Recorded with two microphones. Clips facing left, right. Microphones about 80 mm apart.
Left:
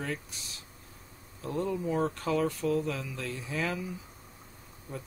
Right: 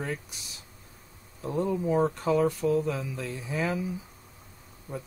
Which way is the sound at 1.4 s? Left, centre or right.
Centre.